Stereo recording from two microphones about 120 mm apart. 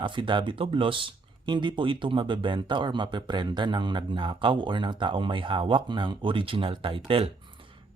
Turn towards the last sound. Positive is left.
turn(degrees=-50)  # may be behind; listen again after turning